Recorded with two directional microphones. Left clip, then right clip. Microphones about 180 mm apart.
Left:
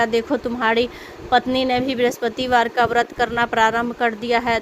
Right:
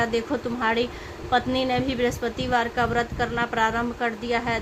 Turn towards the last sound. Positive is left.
turn(degrees=50)  # may be behind; listen again after turning